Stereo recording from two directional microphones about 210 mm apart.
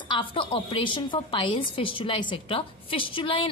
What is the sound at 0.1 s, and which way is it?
A woman's voice, 25° left (ahead or behind).